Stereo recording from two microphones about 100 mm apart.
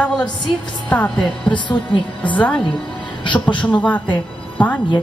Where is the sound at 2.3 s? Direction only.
10° left (ahead or behind).